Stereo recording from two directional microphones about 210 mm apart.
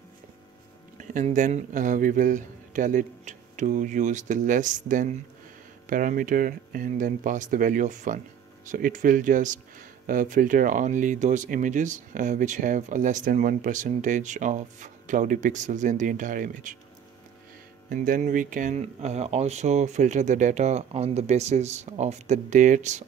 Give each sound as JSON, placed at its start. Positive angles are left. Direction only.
{"t": 0.9, "sound": "speech", "side_deg": -35}
{"t": 17.8, "sound": "speech", "side_deg": -40}